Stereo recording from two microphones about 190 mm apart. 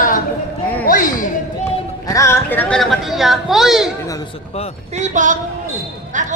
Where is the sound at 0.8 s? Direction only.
45° left (ahead or behind).